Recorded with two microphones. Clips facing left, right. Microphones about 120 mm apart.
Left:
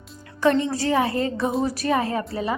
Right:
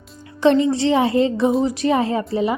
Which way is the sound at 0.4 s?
20° right (ahead or behind).